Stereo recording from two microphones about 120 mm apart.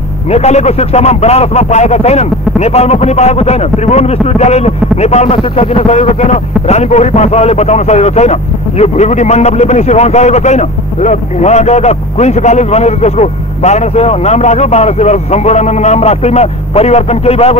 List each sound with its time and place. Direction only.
0.3 s speech: 65° left (ahead or behind)